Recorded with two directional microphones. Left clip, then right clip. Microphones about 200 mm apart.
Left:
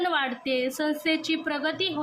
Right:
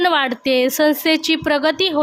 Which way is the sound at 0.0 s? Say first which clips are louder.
Right 10 dB; 55° right (ahead or behind).